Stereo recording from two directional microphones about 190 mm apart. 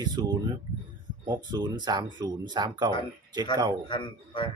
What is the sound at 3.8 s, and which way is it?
Speech, 25° left (ahead or behind).